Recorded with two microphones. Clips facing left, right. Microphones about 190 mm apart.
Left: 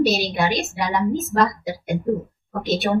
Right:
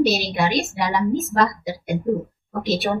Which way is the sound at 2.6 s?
Centre (ahead or behind).